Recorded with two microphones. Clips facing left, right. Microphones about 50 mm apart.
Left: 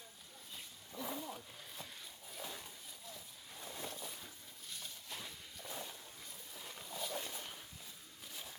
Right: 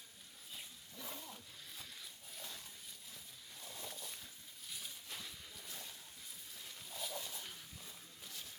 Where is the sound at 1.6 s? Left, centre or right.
Centre.